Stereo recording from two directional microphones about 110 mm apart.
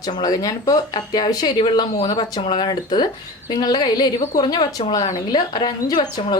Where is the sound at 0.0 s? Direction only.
35° left (ahead or behind).